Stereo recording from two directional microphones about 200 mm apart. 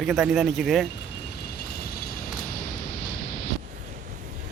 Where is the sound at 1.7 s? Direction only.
50° left (ahead or behind).